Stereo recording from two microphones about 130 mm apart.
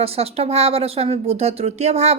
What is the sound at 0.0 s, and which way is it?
Speech, 50° right (ahead or behind).